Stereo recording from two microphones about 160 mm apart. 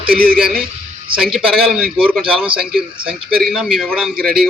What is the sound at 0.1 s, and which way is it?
Speech, 65° right (ahead or behind).